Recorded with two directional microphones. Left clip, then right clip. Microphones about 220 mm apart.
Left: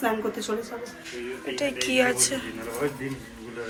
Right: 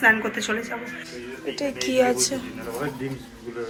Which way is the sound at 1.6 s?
15° right (ahead or behind).